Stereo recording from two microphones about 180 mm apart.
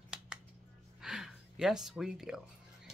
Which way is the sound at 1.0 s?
Centre (ahead or behind).